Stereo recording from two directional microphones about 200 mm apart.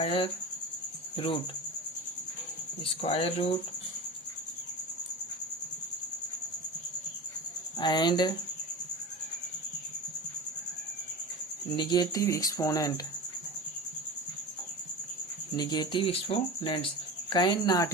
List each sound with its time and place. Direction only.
0.0 s speech: 30° left (ahead or behind)
1.1 s cricket: 25° left (ahead or behind)
2.8 s speech: 30° left (ahead or behind)
7.8 s speech: 20° left (ahead or behind)
11.8 s speech: 20° left (ahead or behind)
15.5 s speech: 20° left (ahead or behind)